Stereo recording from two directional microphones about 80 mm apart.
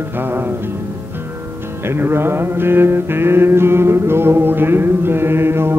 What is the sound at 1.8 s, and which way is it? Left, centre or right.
Music, right.